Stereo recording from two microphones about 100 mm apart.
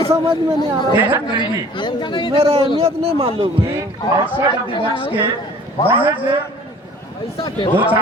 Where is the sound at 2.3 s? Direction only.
75° right (ahead or behind).